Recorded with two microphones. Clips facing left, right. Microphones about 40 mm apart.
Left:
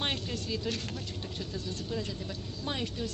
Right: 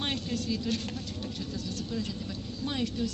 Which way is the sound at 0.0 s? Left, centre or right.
Centre.